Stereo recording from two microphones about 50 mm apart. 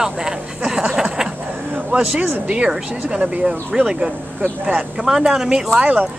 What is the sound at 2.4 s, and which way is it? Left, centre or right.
Speech, centre.